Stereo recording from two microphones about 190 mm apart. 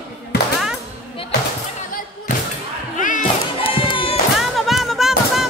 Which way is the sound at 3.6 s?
30° left (ahead or behind).